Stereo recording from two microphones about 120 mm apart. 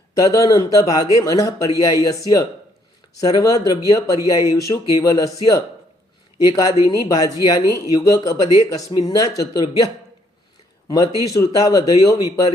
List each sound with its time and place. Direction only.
0.1 s speech: 30° left (ahead or behind)